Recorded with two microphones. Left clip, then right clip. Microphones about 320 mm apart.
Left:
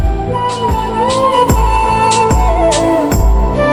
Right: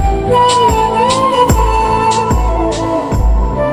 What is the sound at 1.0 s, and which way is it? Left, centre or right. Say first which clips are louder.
Music: left 3 dB; centre.